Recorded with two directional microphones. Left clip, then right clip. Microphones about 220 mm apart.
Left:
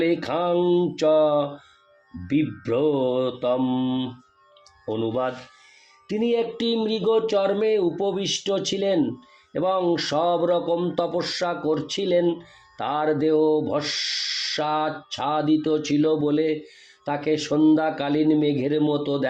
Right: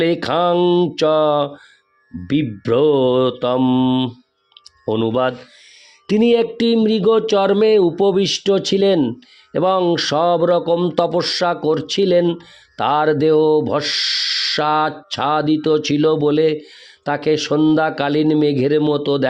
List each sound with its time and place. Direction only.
0.0 s a man's voice: 50° right (ahead or behind)